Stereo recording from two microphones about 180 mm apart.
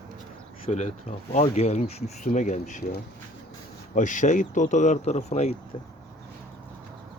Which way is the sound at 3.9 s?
45° left (ahead or behind).